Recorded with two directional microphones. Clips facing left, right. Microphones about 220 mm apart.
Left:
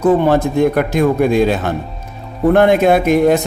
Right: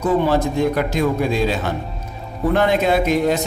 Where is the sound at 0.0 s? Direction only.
55° left (ahead or behind).